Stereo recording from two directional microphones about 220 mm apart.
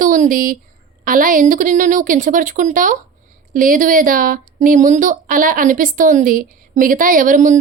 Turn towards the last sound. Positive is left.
turn(degrees=-35)  # may be behind; listen again after turning